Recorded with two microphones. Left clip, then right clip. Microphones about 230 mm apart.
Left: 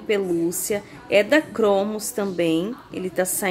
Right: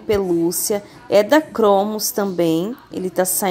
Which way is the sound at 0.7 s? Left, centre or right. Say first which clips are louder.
Right 4 dB; centre.